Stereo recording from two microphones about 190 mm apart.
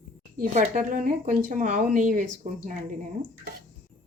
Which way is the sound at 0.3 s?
45° right (ahead or behind).